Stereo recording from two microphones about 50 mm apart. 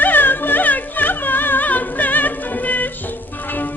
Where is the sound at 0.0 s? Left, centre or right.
Left.